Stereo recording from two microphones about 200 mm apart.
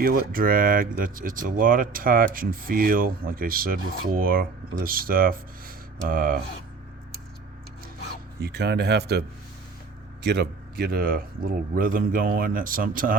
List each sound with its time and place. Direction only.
0.0 s speech: 45° right (ahead or behind)
8.4 s speech: 55° right (ahead or behind)
10.2 s speech: 55° right (ahead or behind)